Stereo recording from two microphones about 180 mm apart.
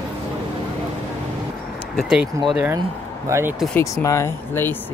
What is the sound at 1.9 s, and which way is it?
Speech, 5° right (ahead or behind).